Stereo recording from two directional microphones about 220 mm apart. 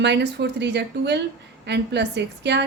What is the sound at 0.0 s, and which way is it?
A woman's voice, 50° right (ahead or behind).